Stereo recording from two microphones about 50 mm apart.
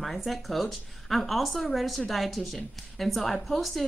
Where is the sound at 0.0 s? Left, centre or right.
Centre.